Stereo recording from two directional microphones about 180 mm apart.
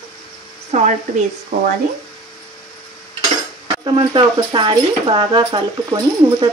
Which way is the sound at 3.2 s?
25° right (ahead or behind).